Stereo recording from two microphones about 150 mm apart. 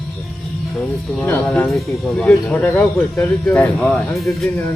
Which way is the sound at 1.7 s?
Centre (ahead or behind).